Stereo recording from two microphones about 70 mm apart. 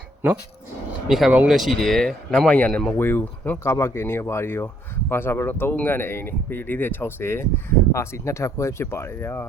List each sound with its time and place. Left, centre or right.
1.0 s speech: centre
3.0 s speech: left
3.6 s speech: left